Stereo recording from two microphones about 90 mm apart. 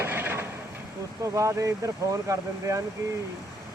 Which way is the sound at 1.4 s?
35° right (ahead or behind).